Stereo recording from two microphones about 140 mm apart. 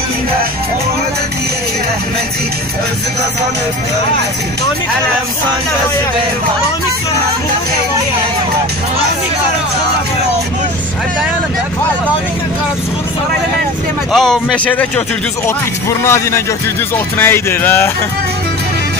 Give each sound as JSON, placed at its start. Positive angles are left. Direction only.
{"t": 14.1, "sound": "a man's voice", "side_deg": 0}
{"t": 16.0, "sound": "speech", "side_deg": 20}